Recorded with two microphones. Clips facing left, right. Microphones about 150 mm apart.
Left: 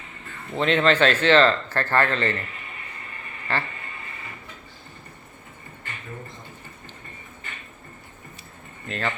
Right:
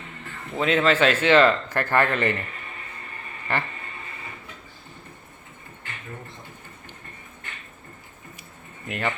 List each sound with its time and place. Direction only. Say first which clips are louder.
0.5 s speech: left 1 dB; 5° right (ahead or behind)
3.5 s speech: even; 15° right (ahead or behind)
8.9 s speech: right 1 dB; 15° right (ahead or behind)